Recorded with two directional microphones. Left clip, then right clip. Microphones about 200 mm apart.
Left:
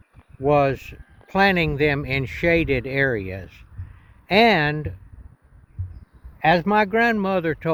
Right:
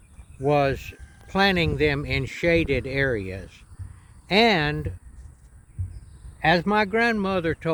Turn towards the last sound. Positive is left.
turn(degrees=50)  # may be behind; listen again after turning